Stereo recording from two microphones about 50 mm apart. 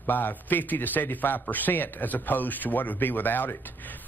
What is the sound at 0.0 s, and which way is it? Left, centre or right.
Speech, left.